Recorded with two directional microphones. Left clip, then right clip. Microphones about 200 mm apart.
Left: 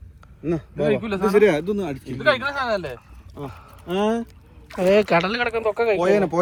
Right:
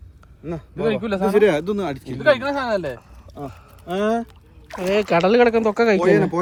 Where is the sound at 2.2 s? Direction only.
55° right (ahead or behind).